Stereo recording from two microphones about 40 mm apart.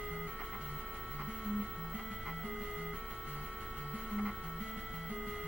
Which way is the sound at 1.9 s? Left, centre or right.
Centre.